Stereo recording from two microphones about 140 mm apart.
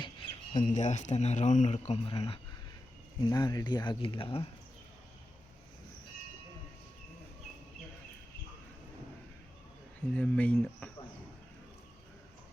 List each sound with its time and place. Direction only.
0.5 s speech: 60° left (ahead or behind); by 2.4 s 40° left (ahead or behind)
3.2 s speech: 30° left (ahead or behind)
10.1 s speech: 10° left (ahead or behind)